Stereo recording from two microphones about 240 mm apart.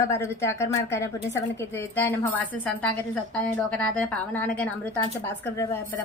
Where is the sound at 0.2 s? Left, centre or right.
Centre.